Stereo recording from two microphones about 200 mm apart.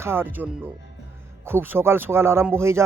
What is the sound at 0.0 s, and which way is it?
A man's voice, 10° right (ahead or behind).